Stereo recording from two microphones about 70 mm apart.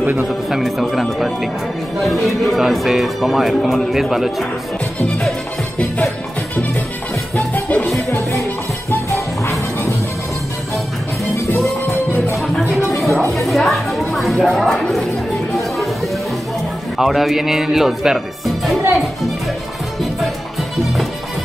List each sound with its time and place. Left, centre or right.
0.0 s a man's voice: right
0.5 s speech: centre
7.3 s music: left
11.9 s music: left
12.7 s music: centre
17.0 s speech: centre